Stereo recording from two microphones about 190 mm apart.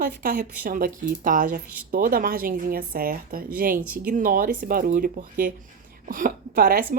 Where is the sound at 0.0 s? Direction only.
45° right (ahead or behind).